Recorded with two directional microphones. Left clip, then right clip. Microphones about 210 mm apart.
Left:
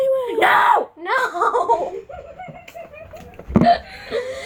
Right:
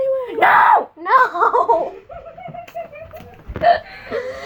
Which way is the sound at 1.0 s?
10° right (ahead or behind).